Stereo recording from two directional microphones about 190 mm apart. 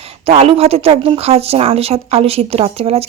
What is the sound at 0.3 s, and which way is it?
Speech, 30° right (ahead or behind).